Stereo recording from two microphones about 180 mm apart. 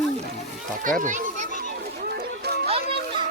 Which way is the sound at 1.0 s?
45° right (ahead or behind).